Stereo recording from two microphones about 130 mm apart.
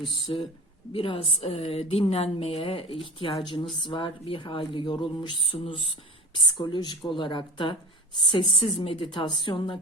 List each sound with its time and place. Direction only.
0.3 s a woman's voice: 35° left (ahead or behind)